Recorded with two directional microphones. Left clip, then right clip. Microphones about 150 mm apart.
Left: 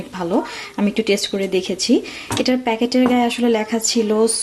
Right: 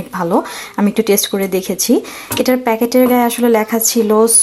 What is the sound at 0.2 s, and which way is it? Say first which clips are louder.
Speech: right 5 dB; 15° right (ahead or behind).